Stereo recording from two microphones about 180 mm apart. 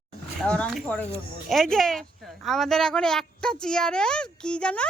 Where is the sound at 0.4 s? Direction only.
5° left (ahead or behind).